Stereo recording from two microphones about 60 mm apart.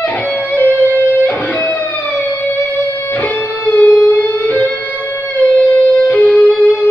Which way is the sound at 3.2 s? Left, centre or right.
Left.